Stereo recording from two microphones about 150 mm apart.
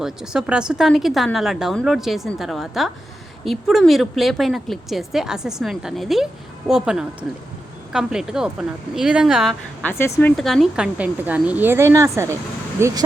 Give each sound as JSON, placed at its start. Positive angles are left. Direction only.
{"t": 0.0, "sound": "a woman's voice", "side_deg": -5}
{"t": 9.8, "sound": "speech", "side_deg": 15}
{"t": 10.3, "sound": "a woman's voice", "side_deg": 0}